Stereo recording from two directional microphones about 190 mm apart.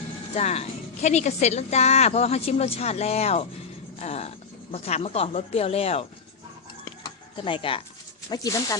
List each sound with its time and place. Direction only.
0.3 s a woman's voice: 35° left (ahead or behind)
7.0 s a sound: 25° left (ahead or behind)
8.3 s speech: 20° left (ahead or behind)